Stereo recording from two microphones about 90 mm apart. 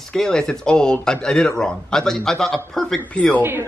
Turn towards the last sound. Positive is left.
turn(degrees=15)  # may be behind; listen again after turning